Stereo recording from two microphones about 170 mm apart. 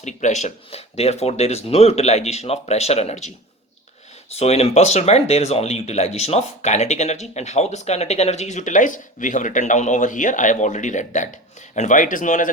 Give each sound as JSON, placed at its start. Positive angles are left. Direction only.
{"t": 0.0, "sound": "speech", "side_deg": 45}
{"t": 4.4, "sound": "speech", "side_deg": 40}